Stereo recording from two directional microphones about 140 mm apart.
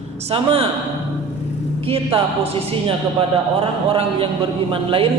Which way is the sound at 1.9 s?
40° right (ahead or behind).